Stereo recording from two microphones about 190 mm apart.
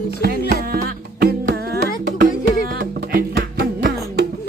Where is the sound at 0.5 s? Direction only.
55° right (ahead or behind).